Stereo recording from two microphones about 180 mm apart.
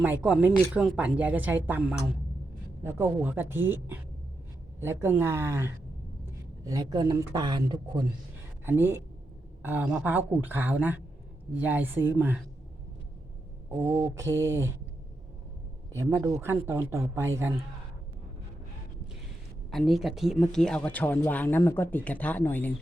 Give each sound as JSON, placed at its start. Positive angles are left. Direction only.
{"t": 0.0, "sound": "speech", "side_deg": -10}
{"t": 8.6, "sound": "speech", "side_deg": -10}
{"t": 13.7, "sound": "speech", "side_deg": -10}
{"t": 16.0, "sound": "speech", "side_deg": -15}
{"t": 19.7, "sound": "speech", "side_deg": 0}